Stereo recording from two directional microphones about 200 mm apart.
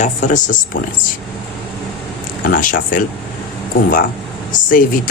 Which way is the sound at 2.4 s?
45° left (ahead or behind).